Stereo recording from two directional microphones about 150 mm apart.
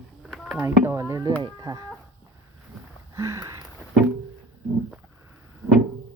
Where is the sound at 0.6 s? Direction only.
20° right (ahead or behind).